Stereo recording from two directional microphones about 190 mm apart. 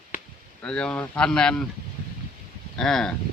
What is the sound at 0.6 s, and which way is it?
Speech, 5° left (ahead or behind).